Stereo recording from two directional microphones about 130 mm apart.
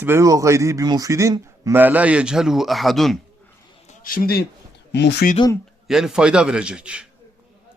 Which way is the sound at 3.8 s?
75° left (ahead or behind).